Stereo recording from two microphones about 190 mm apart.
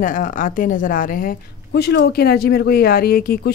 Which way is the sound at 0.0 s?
45° left (ahead or behind).